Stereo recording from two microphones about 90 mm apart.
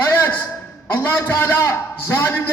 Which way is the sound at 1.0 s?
25° left (ahead or behind).